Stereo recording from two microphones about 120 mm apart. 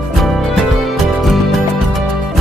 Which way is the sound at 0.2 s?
Centre (ahead or behind).